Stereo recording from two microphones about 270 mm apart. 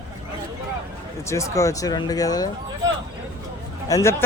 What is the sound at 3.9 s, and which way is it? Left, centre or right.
Speech, centre.